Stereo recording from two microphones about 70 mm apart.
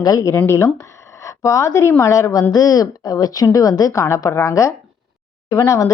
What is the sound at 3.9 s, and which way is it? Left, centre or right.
A woman's voice, left.